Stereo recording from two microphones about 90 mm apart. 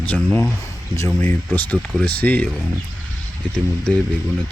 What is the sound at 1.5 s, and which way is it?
Speech, 20° left (ahead or behind).